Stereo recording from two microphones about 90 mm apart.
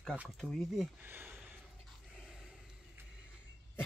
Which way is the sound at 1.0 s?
20° right (ahead or behind).